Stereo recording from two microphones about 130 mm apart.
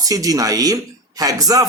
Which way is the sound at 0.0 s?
30° right (ahead or behind).